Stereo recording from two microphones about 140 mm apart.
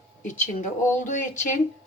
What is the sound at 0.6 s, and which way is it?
Music, 65° left (ahead or behind).